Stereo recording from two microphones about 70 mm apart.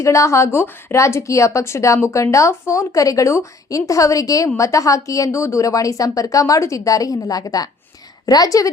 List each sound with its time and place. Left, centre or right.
0.0 s a woman's voice: left